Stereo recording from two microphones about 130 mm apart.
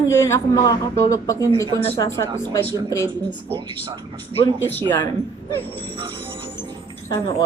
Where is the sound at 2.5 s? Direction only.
20° left (ahead or behind).